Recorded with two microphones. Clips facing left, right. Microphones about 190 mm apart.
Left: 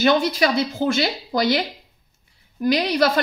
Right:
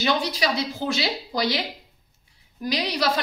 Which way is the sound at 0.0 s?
50° left (ahead or behind).